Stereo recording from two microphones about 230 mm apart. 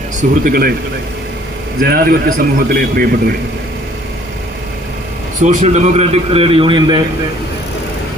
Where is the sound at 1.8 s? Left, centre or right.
Right.